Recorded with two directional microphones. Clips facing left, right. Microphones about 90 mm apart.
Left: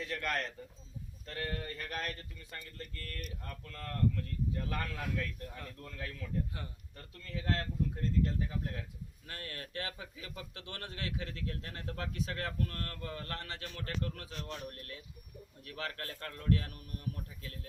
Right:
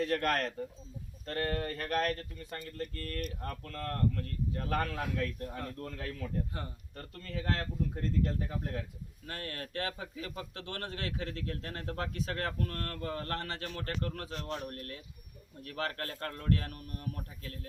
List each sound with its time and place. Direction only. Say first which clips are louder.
0.0 s speech: right 6 dB; 50° right (ahead or behind)
2.5 s speech: right 7 dB; 40° right (ahead or behind)